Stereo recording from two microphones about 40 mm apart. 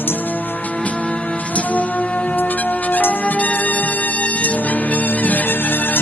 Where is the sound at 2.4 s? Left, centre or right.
Left.